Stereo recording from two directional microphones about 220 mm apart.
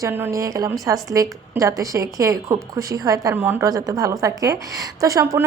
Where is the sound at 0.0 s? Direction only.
10° right (ahead or behind).